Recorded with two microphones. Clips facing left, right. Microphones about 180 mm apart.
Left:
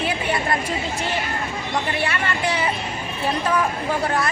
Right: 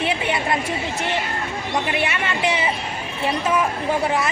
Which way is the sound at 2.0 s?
20° right (ahead or behind).